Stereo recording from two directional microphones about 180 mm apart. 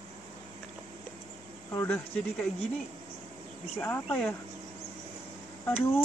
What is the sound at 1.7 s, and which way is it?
Speech, 15° left (ahead or behind).